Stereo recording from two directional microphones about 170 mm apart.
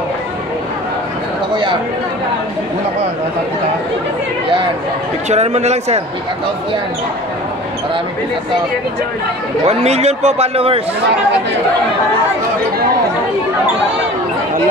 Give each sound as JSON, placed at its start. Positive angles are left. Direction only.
{"t": 1.5, "sound": "speech", "side_deg": -30}
{"t": 5.3, "sound": "a man's voice", "side_deg": -40}
{"t": 9.7, "sound": "a man's voice", "side_deg": -40}